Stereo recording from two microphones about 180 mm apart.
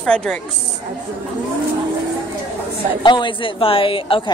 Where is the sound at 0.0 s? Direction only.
5° left (ahead or behind).